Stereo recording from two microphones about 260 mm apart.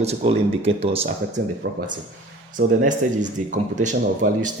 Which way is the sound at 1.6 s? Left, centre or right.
Right.